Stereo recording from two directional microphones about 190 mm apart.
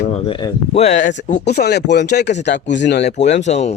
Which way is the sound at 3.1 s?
40° left (ahead or behind).